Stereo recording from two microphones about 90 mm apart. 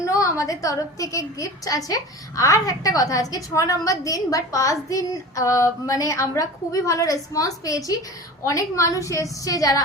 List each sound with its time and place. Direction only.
0.0 s a woman's voice: 35° left (ahead or behind)